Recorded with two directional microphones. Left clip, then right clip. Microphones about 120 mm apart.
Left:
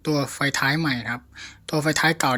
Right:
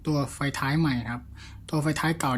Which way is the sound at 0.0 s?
30° left (ahead or behind).